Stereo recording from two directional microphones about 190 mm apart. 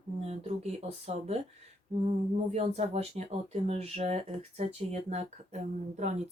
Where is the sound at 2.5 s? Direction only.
35° right (ahead or behind).